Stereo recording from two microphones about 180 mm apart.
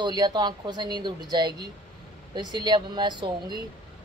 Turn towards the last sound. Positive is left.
turn(degrees=-25)  # may be behind; listen again after turning